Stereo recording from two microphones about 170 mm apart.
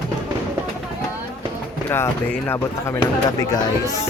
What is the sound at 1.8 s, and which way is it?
Speech, 15° left (ahead or behind).